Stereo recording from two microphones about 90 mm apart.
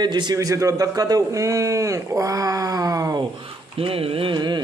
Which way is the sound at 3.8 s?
90° right.